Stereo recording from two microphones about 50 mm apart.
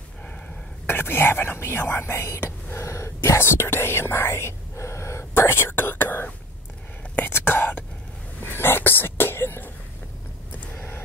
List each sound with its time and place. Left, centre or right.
0.8 s speech: left
5.3 s speech: left
7.2 s whispering: left
8.4 s a sound: left